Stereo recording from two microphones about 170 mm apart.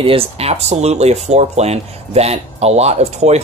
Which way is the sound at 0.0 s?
35° right (ahead or behind).